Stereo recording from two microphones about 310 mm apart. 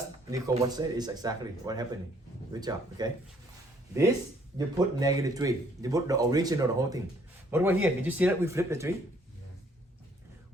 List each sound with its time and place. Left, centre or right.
0.3 s speech: centre
4.5 s speech: centre